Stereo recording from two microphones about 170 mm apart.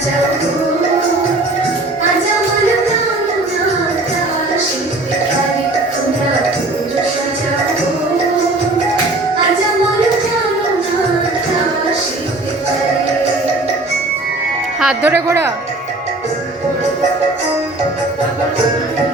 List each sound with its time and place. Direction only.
14.8 s music: 5° right (ahead or behind)
15.3 s speech: 15° right (ahead or behind)